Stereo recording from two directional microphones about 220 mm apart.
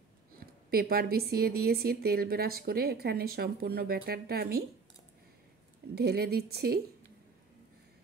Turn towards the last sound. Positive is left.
turn(degrees=-45)  # may be behind; listen again after turning